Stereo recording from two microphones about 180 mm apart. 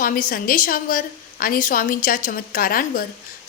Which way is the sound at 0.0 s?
50° left (ahead or behind).